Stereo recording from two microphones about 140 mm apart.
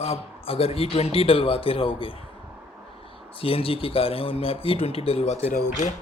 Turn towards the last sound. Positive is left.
turn(degrees=60)  # may be behind; listen again after turning